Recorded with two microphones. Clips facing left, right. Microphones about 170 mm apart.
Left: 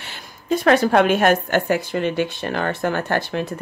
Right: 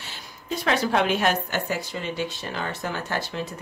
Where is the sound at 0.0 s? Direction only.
60° left (ahead or behind).